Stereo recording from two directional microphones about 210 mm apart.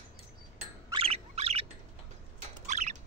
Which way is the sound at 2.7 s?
35° right (ahead or behind).